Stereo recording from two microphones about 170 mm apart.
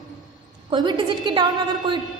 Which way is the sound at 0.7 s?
25° right (ahead or behind).